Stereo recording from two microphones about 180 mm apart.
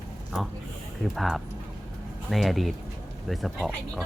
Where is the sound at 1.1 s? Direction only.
Centre (ahead or behind).